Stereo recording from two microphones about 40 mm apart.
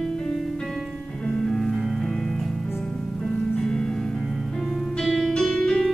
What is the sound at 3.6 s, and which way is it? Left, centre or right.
Music, centre.